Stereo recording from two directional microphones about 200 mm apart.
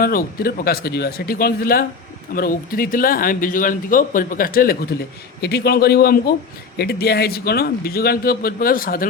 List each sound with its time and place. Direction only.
0.0 s speech: 45° left (ahead or behind)